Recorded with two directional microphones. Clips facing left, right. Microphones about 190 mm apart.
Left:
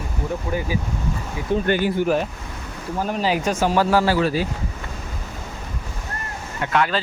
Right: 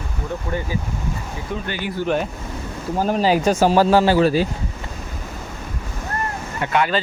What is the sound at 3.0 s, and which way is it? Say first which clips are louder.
Speech: right 4 dB; 35° right (ahead or behind).